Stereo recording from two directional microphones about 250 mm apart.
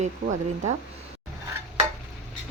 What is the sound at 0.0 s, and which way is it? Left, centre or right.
Speech, right.